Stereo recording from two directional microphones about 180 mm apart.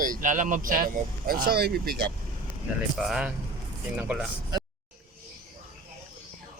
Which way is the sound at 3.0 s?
5° right (ahead or behind).